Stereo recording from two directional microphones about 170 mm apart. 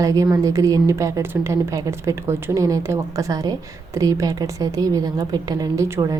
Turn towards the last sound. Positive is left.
turn(degrees=-20)  # may be behind; listen again after turning